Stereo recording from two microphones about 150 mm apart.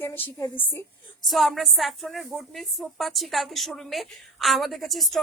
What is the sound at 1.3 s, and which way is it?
A woman's voice, centre (ahead or behind).